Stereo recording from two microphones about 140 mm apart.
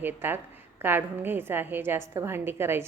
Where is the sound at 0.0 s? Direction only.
15° right (ahead or behind).